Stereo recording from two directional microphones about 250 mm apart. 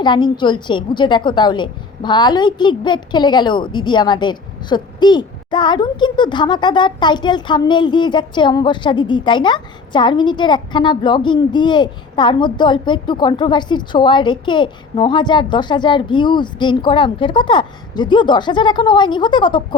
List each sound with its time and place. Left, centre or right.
0.0 s a woman's voice: centre